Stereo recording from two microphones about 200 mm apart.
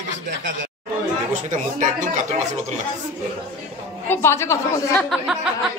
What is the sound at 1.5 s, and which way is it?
Speech, 40° right (ahead or behind).